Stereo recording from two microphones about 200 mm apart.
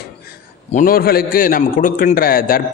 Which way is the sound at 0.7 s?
45° left (ahead or behind).